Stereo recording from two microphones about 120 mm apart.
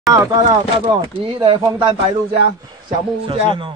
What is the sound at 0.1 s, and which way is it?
Speech, 30° right (ahead or behind).